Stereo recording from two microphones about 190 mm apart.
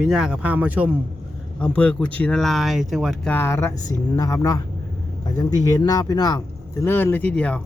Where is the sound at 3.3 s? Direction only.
15° left (ahead or behind).